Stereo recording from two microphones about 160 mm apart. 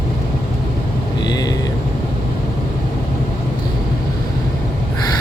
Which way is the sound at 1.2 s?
25° left (ahead or behind).